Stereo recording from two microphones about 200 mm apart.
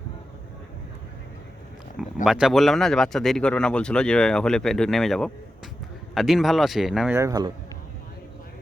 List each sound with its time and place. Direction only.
2.2 s speech: 5° right (ahead or behind)
7.2 s speech: 20° right (ahead or behind)